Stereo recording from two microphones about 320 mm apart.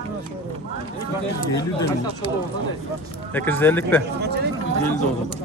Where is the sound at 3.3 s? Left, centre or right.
Centre.